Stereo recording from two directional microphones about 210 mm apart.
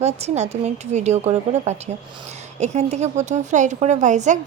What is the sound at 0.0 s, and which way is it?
A woman's voice, 30° right (ahead or behind).